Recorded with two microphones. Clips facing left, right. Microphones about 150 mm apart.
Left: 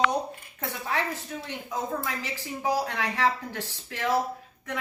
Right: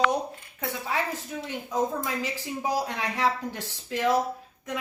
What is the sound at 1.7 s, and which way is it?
Speech, 15° right (ahead or behind).